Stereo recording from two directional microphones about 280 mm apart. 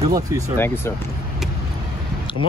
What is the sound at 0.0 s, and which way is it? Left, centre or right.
Speech, centre.